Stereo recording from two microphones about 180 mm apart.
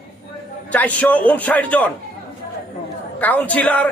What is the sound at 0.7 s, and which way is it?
A man's voice, 10° left (ahead or behind).